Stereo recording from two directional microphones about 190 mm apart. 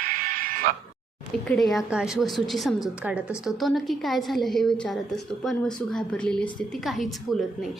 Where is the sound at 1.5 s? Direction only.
Centre (ahead or behind).